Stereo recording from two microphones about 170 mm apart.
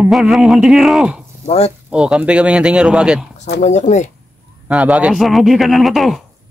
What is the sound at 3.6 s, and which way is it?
Speech, 45° left (ahead or behind).